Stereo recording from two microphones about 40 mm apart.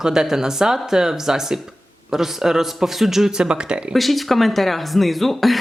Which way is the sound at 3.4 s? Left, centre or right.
Right.